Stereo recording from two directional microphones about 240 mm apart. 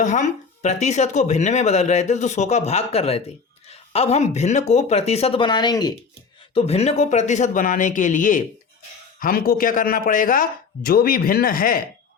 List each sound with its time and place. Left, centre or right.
0.0 s speech: left